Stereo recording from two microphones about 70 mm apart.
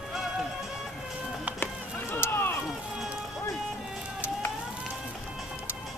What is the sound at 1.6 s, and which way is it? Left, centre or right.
Run, left.